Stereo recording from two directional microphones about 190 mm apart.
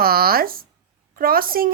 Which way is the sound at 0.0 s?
50° right (ahead or behind).